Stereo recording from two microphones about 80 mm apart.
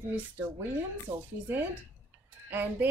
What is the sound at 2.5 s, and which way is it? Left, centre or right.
Speech, right.